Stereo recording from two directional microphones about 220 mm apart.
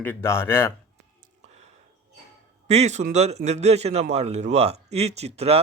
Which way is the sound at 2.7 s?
30° right (ahead or behind).